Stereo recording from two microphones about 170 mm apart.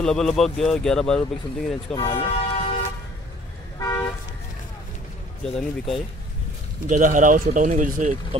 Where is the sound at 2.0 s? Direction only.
25° left (ahead or behind).